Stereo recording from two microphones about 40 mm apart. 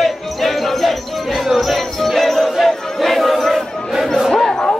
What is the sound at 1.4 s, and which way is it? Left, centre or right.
Crowd, centre.